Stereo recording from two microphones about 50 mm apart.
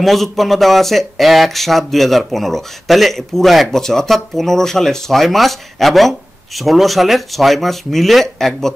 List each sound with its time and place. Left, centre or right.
0.0 s speech: centre